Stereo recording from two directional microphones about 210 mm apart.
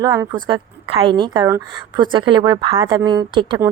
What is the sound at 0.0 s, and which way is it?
A woman's voice, 15° right (ahead or behind).